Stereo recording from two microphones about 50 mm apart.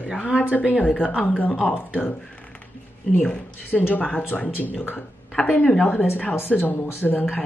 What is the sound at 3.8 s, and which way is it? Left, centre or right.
Speech, left.